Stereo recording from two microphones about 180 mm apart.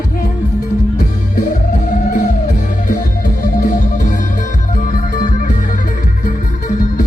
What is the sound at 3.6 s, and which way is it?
Music, 45° left (ahead or behind).